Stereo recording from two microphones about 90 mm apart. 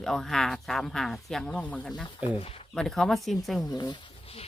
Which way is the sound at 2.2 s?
15° right (ahead or behind).